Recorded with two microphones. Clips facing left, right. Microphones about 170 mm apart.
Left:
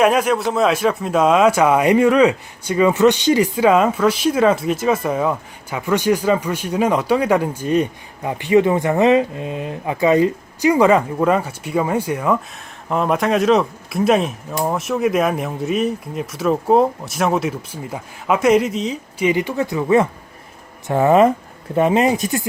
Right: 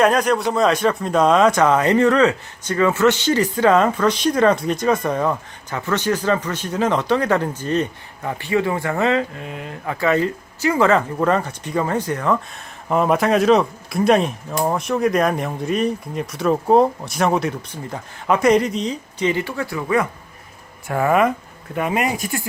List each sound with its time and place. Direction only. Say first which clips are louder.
0.0 s speech: left 1 dB; 5° left (ahead or behind)
19.3 s speech: left 4 dB; 15° left (ahead or behind)